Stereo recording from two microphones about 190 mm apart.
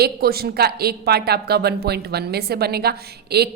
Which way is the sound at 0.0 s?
55° right (ahead or behind).